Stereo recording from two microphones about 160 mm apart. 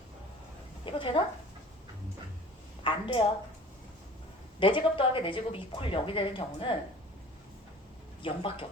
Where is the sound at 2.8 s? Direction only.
30° left (ahead or behind).